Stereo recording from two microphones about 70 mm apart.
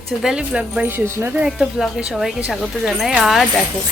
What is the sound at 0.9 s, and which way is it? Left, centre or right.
Speech, right.